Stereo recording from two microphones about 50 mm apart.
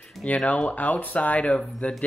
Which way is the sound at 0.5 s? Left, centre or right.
Left.